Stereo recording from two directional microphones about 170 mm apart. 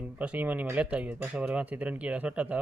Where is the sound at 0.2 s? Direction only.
10° right (ahead or behind).